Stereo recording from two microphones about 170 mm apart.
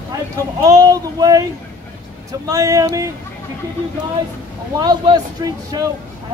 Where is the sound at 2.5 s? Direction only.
20° right (ahead or behind).